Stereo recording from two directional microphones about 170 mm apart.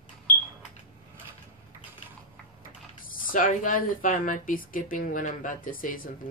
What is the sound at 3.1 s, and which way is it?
Speech, 55° left (ahead or behind).